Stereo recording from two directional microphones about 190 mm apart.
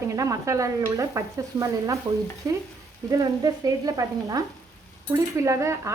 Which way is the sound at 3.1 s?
15° right (ahead or behind).